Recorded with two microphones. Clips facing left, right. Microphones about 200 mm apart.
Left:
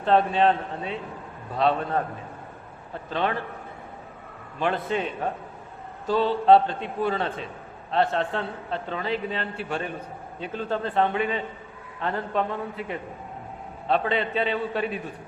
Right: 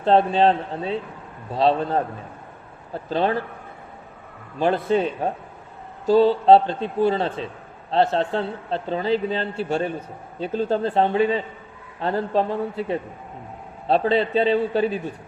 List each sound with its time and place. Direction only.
0.0 s a man's voice: 30° right (ahead or behind)
4.6 s a man's voice: 35° right (ahead or behind)